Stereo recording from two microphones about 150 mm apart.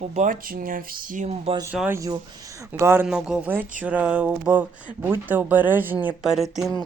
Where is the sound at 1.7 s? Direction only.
10° right (ahead or behind).